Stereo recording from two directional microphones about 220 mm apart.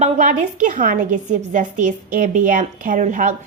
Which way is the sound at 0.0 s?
35° right (ahead or behind).